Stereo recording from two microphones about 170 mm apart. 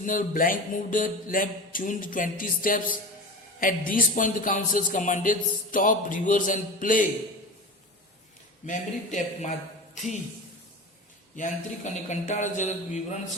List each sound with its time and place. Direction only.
0.0 s speech: 55° left (ahead or behind)
8.6 s a man's voice: 50° left (ahead or behind)
11.3 s speech: 45° left (ahead or behind)